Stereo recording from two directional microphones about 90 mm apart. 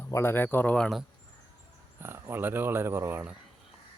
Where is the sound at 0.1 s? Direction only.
25° left (ahead or behind).